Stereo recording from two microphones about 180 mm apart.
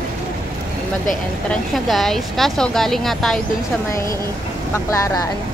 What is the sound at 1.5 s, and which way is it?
Speech, centre (ahead or behind).